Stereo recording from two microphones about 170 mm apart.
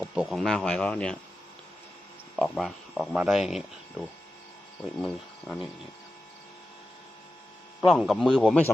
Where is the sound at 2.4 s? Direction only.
Centre (ahead or behind).